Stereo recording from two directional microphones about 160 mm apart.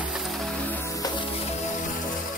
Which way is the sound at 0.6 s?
15° left (ahead or behind).